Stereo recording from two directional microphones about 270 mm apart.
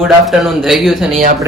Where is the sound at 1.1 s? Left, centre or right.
Right.